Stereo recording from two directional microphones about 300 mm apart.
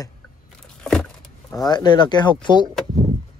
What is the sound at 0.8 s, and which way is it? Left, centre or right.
Vehicle, centre.